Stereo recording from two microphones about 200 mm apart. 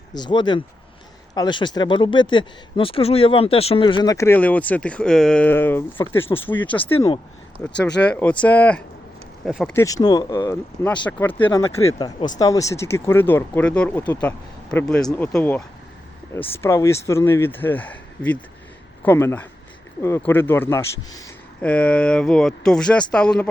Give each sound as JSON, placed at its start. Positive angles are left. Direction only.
{"t": 0.1, "sound": "speech", "side_deg": 20}
{"t": 6.2, "sound": "speech", "side_deg": 25}
{"t": 6.5, "sound": "speech", "side_deg": 10}
{"t": 9.7, "sound": "speech", "side_deg": 15}
{"t": 21.6, "sound": "speech", "side_deg": 5}